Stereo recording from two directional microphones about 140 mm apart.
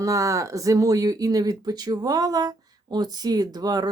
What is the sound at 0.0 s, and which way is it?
Speech, 25° right (ahead or behind).